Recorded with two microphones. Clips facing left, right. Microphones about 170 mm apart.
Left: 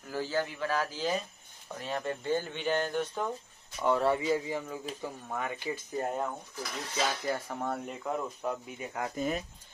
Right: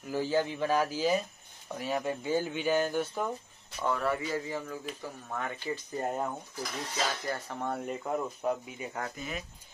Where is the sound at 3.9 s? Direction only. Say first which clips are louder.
Left 4 dB; 25° left (ahead or behind).